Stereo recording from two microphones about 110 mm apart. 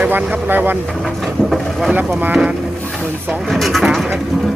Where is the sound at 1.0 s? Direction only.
Centre (ahead or behind).